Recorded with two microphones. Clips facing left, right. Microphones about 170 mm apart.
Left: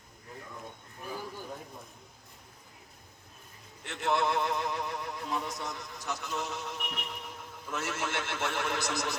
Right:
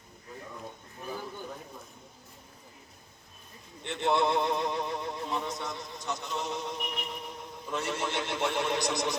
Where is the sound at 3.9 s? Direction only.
20° right (ahead or behind).